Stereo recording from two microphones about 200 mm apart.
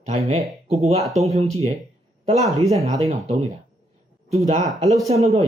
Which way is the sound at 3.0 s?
30° right (ahead or behind).